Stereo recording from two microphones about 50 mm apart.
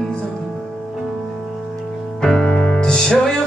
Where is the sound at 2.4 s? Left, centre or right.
Left.